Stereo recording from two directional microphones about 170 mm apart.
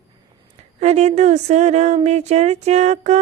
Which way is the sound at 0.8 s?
40° right (ahead or behind).